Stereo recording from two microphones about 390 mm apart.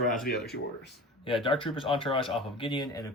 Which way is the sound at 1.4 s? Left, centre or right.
Centre.